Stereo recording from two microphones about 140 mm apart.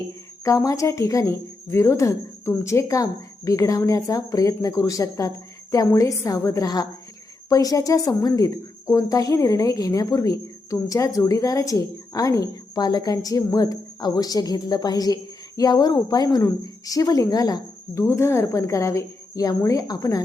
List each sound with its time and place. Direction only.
0.4 s a woman's voice: 25° left (ahead or behind)